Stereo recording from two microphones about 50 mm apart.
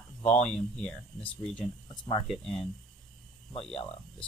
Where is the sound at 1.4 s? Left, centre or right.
Centre.